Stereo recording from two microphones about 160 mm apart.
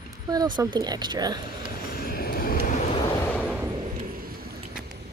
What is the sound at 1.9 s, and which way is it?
Vehicle, 70° left (ahead or behind).